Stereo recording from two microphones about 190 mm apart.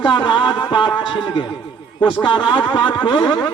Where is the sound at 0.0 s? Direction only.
25° left (ahead or behind).